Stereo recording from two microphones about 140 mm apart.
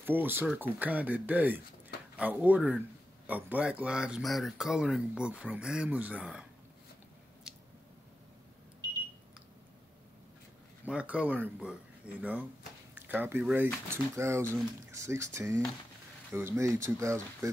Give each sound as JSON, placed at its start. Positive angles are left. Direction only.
{"t": 0.0, "sound": "speech", "side_deg": -15}
{"t": 7.5, "sound": "squish", "side_deg": -5}
{"t": 10.9, "sound": "speech", "side_deg": -10}